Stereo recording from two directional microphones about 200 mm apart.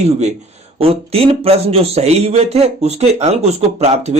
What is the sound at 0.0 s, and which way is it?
Speech, 35° right (ahead or behind).